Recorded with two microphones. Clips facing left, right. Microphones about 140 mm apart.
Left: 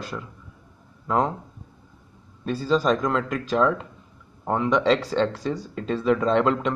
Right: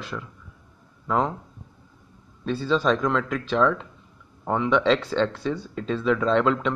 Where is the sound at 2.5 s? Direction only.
10° left (ahead or behind).